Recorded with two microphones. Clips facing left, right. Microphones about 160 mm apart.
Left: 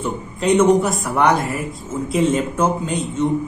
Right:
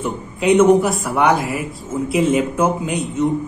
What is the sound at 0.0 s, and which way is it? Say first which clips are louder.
Speech: right 2 dB; 5° right (ahead or behind).